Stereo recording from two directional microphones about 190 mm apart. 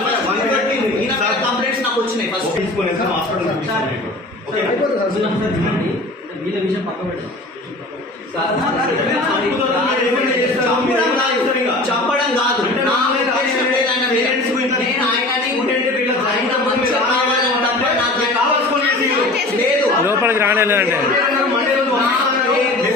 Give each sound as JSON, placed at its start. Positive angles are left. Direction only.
{"t": 20.1, "sound": "a man's voice", "side_deg": -10}